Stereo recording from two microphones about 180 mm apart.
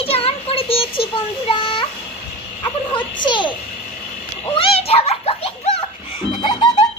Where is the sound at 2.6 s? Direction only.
25° left (ahead or behind).